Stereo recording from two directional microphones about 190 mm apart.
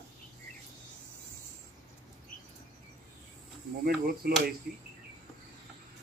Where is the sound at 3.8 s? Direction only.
50° right (ahead or behind).